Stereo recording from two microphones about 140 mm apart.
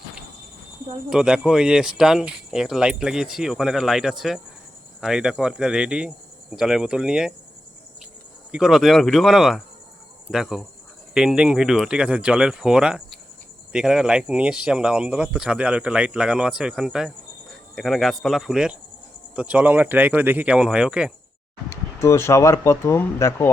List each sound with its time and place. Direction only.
1.1 s speech: 5° right (ahead or behind)
8.5 s speech: 5° right (ahead or behind)
21.7 s speech: 20° left (ahead or behind)